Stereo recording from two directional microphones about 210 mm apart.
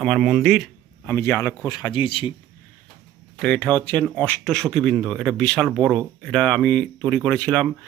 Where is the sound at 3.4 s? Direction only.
5° left (ahead or behind).